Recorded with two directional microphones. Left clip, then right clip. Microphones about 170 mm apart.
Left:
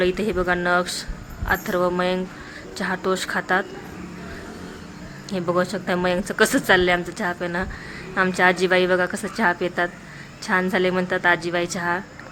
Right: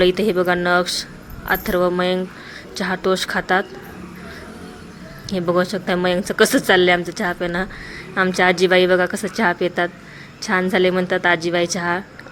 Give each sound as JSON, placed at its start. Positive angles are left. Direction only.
{"t": 0.0, "sound": "a woman's voice", "side_deg": -25}
{"t": 5.3, "sound": "a woman's voice", "side_deg": -20}